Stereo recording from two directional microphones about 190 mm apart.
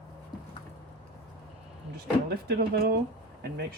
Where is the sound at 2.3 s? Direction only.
55° right (ahead or behind).